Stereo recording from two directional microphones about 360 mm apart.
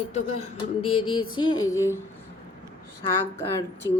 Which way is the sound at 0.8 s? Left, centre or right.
Left.